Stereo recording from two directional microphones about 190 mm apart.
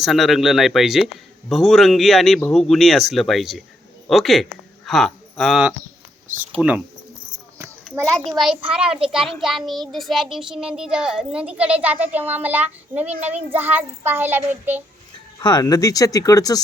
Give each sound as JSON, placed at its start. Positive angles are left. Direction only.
{"t": 0.0, "sound": "a child's voice", "side_deg": 0}
{"t": 8.0, "sound": "a child's voice", "side_deg": 5}
{"t": 15.4, "sound": "speech", "side_deg": 20}